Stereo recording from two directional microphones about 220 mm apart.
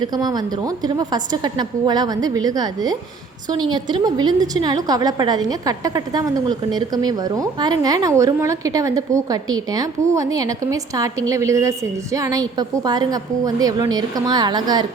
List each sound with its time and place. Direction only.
0.0 s a woman's voice: 20° right (ahead or behind)